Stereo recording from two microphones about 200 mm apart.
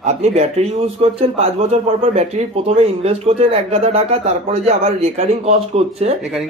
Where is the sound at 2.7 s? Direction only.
30° right (ahead or behind).